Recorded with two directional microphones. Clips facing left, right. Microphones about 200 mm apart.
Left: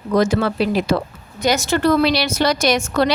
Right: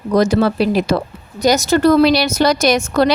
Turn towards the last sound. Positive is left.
turn(degrees=-40)  # may be behind; listen again after turning